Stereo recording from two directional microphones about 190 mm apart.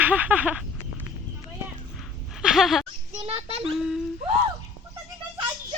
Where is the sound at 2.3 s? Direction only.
Centre (ahead or behind).